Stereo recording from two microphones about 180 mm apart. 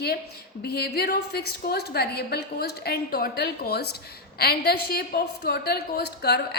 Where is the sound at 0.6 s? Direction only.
60° left (ahead or behind).